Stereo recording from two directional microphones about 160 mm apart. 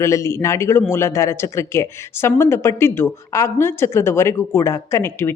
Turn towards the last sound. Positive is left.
turn(degrees=15)  # may be behind; listen again after turning